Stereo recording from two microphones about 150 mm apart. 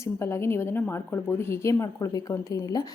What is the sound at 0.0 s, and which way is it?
A woman's voice, 20° left (ahead or behind).